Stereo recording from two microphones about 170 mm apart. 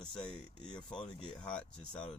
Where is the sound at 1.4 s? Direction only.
5° left (ahead or behind).